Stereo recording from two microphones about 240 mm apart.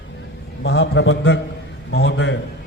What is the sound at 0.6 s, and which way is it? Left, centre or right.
Speech, left.